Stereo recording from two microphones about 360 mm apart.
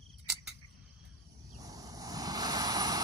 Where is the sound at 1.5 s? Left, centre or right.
Centre.